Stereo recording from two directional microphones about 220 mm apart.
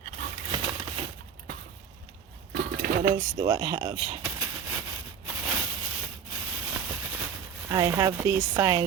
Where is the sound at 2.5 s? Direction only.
45° right (ahead or behind).